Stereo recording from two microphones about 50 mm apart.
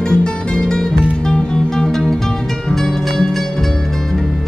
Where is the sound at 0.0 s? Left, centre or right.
Centre.